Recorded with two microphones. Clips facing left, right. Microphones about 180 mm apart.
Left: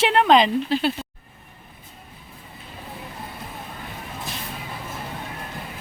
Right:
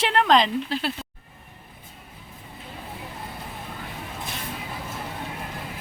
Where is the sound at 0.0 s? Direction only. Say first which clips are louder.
Left 3 dB; 5° left (ahead or behind).